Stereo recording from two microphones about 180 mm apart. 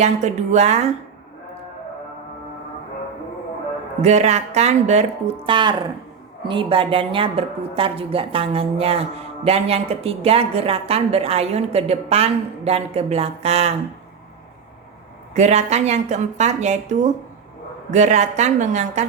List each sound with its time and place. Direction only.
0.0 s a woman's voice: 40° right (ahead or behind)
4.0 s a woman's voice: 40° right (ahead or behind)
15.4 s a woman's voice: 40° right (ahead or behind)